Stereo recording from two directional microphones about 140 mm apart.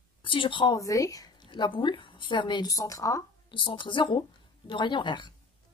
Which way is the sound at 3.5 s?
35° left (ahead or behind).